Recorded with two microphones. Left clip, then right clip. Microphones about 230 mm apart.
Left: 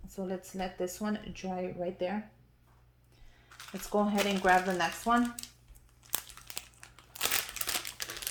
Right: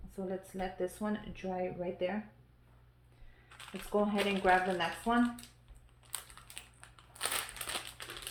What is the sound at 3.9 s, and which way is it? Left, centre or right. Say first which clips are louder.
Speech: left 2 dB; left.